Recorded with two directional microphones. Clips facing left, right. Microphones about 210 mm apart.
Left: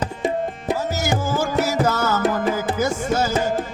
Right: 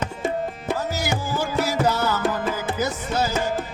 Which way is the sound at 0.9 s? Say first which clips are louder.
Left 3 dB; 45° left (ahead or behind).